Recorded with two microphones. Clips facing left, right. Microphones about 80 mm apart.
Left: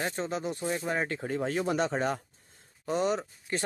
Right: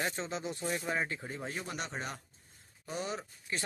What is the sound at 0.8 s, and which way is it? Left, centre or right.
Speech, left.